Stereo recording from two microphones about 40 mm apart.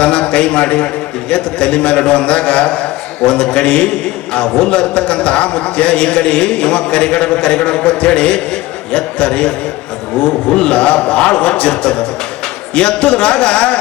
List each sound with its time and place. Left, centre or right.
0.0 s a man's voice: left